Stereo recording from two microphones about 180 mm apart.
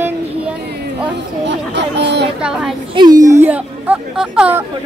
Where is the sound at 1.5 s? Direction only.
75° right (ahead or behind).